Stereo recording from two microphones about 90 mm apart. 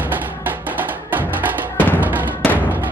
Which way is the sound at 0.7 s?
20° right (ahead or behind).